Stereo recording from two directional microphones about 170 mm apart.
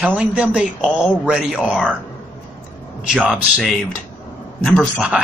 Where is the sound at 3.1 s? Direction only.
5° right (ahead or behind).